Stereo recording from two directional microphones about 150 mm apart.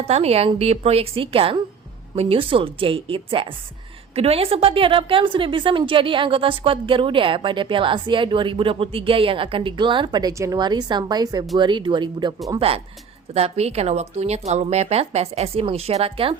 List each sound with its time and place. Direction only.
0.0 s a woman's voice: 45° right (ahead or behind)